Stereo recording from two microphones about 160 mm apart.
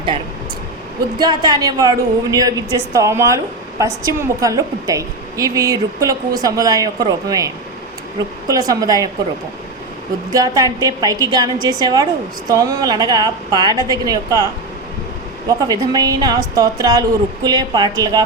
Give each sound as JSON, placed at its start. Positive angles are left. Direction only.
{"t": 1.2, "sound": "a woman's voice", "side_deg": -25}
{"t": 10.3, "sound": "a woman's voice", "side_deg": -20}
{"t": 15.4, "sound": "a woman's voice", "side_deg": -25}